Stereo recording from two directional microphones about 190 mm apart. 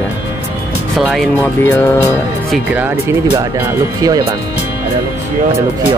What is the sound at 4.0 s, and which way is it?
Speech, 20° right (ahead or behind).